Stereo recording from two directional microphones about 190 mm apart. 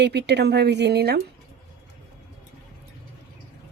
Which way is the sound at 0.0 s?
60° right (ahead or behind).